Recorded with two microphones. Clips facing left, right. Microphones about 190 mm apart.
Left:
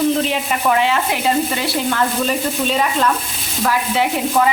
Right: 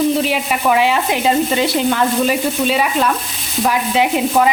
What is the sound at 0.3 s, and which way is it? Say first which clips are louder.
Stir: right 2 dB; 10° right (ahead or behind).